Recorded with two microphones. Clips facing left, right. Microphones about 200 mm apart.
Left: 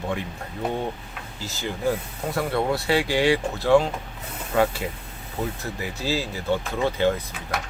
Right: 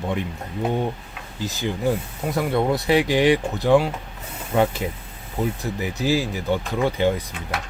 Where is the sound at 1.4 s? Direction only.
15° right (ahead or behind).